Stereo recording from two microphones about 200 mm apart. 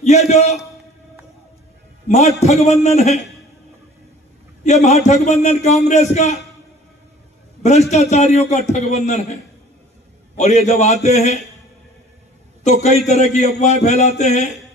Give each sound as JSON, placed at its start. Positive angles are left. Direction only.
{"t": 0.0, "sound": "a man's voice", "side_deg": 35}
{"t": 2.0, "sound": "a man's voice", "side_deg": 35}
{"t": 4.6, "sound": "a man's voice", "side_deg": 35}
{"t": 7.9, "sound": "a man's voice", "side_deg": 35}
{"t": 12.6, "sound": "a man's voice", "side_deg": 35}